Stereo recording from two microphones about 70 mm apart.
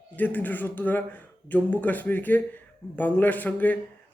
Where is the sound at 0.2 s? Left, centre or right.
Left.